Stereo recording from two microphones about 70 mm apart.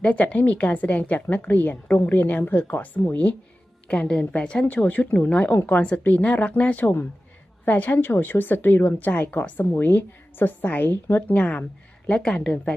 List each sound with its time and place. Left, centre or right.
0.0 s a woman's voice: centre
3.8 s a woman's voice: centre